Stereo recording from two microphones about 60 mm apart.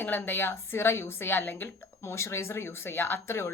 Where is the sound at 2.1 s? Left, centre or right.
Left.